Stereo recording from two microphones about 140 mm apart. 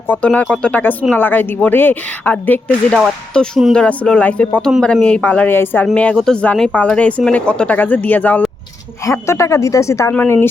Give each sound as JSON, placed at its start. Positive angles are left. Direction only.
{"t": 0.1, "sound": "speech", "side_deg": 10}